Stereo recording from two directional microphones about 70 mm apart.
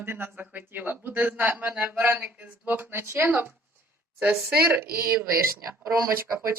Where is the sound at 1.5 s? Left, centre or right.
Centre.